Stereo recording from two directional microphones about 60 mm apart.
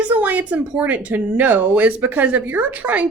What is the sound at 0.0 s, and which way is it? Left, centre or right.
Speech, right.